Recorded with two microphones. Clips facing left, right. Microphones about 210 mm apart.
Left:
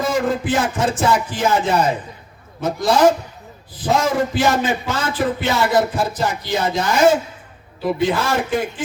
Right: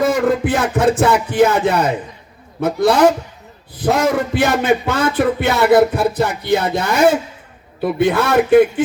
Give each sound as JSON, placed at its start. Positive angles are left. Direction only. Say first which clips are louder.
{"t": 0.0, "sound": "speech", "louder": "right 4 dB", "side_deg": -60}